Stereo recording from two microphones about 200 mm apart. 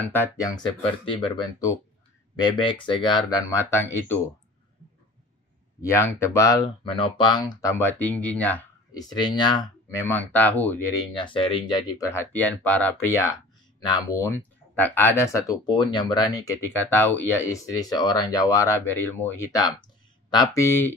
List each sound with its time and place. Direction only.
0.0 s speech: 10° left (ahead or behind)
5.8 s speech: 15° left (ahead or behind)
9.1 s speech: 20° left (ahead or behind)
11.1 s speech: 25° left (ahead or behind)
12.1 s speech: 10° left (ahead or behind)